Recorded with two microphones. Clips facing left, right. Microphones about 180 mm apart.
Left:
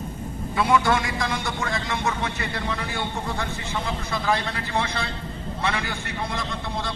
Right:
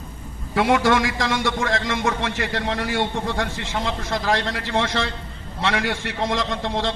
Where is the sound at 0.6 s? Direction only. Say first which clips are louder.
Right 3 dB; 85° right.